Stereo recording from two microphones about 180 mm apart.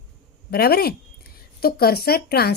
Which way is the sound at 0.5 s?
60° left (ahead or behind).